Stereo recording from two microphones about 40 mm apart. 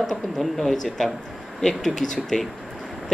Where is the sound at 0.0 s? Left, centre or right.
Centre.